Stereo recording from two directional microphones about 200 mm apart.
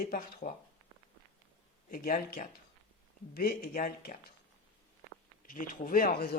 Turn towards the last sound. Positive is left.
turn(degrees=50)  # may be behind; listen again after turning